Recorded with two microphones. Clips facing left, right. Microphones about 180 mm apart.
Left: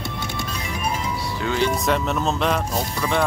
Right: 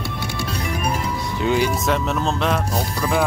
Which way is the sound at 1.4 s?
15° right (ahead or behind).